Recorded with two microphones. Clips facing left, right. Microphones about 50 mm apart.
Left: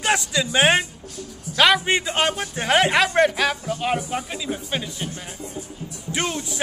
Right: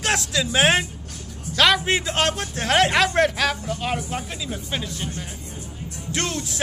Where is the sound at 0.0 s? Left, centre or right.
Centre.